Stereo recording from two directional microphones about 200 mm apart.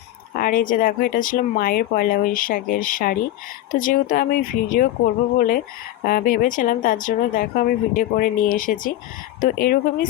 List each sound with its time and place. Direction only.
0.3 s speech: 45° left (ahead or behind)
6.1 s speech: 45° left (ahead or behind)